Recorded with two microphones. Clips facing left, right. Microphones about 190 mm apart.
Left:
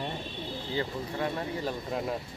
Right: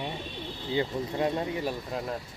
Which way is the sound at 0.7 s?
20° right (ahead or behind).